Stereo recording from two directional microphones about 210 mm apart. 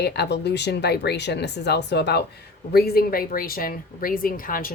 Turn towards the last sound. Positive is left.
turn(degrees=40)  # may be behind; listen again after turning